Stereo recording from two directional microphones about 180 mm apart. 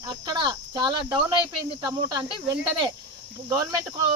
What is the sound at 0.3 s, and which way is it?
Speech, 25° right (ahead or behind).